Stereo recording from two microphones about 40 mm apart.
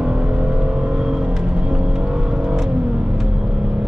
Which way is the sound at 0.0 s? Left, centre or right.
Right.